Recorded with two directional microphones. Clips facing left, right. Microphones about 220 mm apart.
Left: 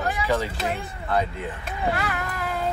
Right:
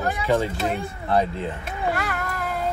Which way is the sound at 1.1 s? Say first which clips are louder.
Right 3 dB; 30° right (ahead or behind).